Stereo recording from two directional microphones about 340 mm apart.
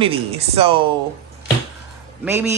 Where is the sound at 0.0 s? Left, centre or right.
Centre.